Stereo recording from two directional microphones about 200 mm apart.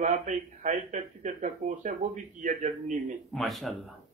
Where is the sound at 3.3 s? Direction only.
Centre (ahead or behind).